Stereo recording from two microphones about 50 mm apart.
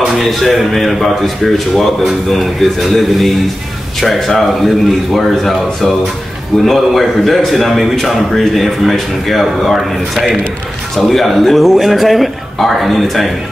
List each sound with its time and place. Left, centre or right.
0.2 s speech: centre